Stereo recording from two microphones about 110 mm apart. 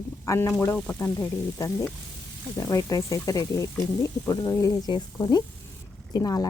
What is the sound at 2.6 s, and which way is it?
A woman's voice, 30° left (ahead or behind).